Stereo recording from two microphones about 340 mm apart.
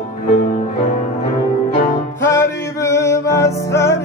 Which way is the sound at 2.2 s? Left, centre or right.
Centre.